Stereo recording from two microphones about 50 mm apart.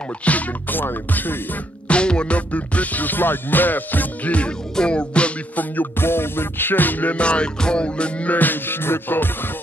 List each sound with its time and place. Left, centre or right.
0.2 s music: left
1.9 s music: left
5.6 s music: left
6.0 s music: left